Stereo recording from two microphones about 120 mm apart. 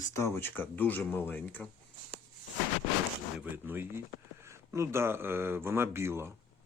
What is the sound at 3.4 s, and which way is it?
Speech, 15° right (ahead or behind).